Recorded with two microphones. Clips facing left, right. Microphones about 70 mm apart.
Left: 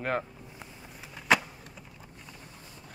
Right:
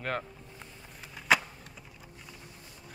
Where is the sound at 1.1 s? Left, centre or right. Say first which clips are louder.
Left 1 dB; centre.